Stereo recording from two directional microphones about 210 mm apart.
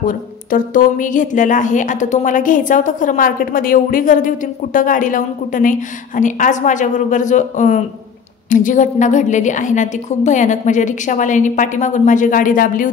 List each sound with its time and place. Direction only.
0.0 s a woman's voice: 40° left (ahead or behind)